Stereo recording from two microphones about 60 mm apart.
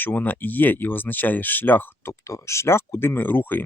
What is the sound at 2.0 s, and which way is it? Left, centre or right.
Speech, left.